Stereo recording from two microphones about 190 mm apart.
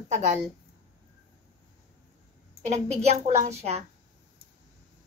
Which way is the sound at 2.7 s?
35° right (ahead or behind).